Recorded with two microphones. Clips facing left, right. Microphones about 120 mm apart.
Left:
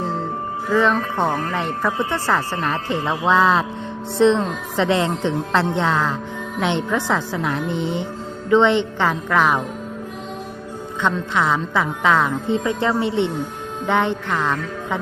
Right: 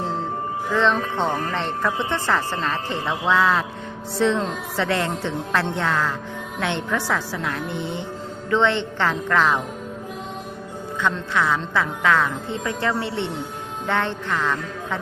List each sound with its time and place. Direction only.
0.7 s a woman's voice: 10° left (ahead or behind)
11.0 s speech: 20° left (ahead or behind)